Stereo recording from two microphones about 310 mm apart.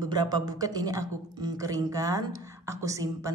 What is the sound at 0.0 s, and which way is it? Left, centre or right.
Speech, centre.